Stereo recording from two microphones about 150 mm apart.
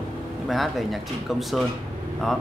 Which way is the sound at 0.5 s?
Centre (ahead or behind).